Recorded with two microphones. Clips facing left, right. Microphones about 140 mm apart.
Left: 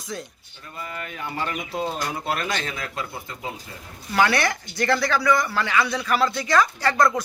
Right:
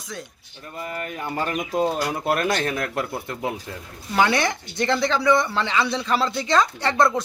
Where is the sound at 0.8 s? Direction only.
45° right (ahead or behind).